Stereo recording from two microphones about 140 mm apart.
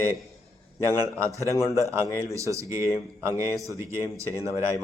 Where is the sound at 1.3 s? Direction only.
20° left (ahead or behind).